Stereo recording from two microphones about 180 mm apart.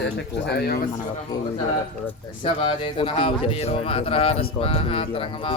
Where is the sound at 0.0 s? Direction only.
70° left (ahead or behind).